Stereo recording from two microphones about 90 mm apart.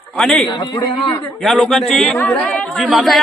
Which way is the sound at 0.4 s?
55° left (ahead or behind).